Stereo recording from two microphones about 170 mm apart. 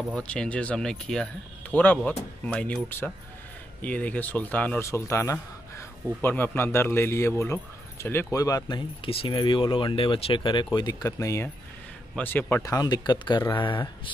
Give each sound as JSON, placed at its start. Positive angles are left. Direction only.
{"t": 0.1, "sound": "speech", "side_deg": 5}